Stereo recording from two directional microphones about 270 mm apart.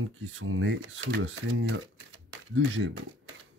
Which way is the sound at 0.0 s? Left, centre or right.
Right.